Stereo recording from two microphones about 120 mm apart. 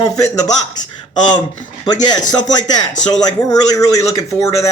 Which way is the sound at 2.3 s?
35° left (ahead or behind).